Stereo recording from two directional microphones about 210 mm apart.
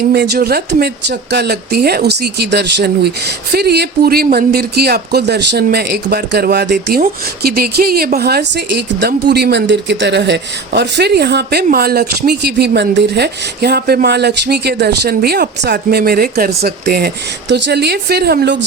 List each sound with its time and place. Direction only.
0.1 s speech: 50° right (ahead or behind)